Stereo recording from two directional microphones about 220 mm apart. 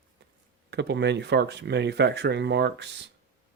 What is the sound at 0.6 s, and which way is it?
Speech, 50° right (ahead or behind).